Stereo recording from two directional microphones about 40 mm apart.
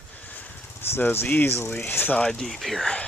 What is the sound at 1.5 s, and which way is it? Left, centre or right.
Speech, left.